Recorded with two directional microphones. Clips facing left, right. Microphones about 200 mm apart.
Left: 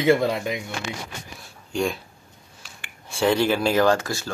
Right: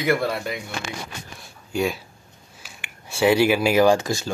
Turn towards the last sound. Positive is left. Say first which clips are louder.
# right 3 dB
turn(degrees=-15)  # may be behind; listen again after turning